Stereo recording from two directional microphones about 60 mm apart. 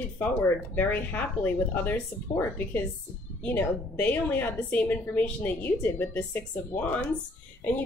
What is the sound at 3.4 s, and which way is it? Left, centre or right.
A woman's voice, left.